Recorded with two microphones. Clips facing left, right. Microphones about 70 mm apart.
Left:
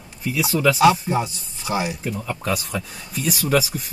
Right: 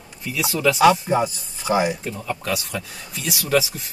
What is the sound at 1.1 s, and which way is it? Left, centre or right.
Speech, right.